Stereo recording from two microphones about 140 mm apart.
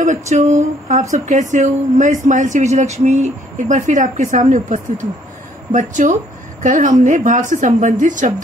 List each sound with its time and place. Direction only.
0.0 s speech: 60° right (ahead or behind)